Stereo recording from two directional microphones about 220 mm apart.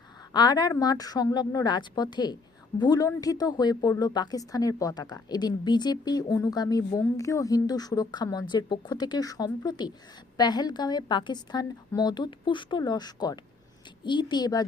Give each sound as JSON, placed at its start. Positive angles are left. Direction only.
{"t": 0.3, "sound": "a woman's voice", "side_deg": 20}